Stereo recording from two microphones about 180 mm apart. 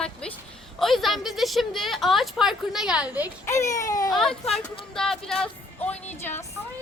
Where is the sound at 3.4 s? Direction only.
15° left (ahead or behind).